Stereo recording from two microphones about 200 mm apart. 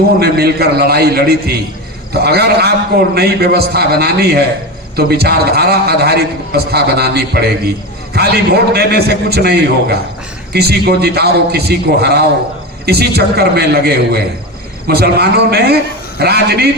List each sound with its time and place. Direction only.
0.2 s a man's voice: 50° right (ahead or behind)